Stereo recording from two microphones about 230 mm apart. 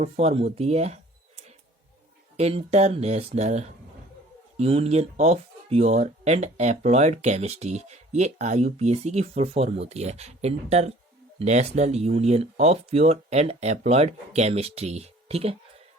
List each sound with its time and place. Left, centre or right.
0.0 s speech: right
2.3 s speech: right